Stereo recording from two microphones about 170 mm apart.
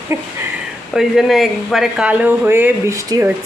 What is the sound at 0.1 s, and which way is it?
Speech, 15° right (ahead or behind).